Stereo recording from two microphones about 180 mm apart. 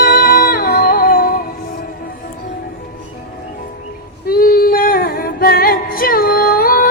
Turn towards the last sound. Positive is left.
turn(degrees=55)  # may be behind; listen again after turning